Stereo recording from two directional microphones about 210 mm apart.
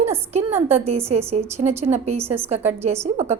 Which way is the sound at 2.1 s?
10° right (ahead or behind).